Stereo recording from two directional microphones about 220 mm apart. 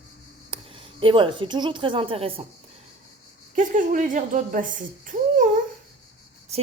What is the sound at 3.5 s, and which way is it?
A woman's voice, 35° right (ahead or behind).